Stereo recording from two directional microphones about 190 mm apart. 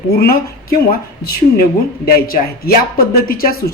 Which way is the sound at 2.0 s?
50° left (ahead or behind).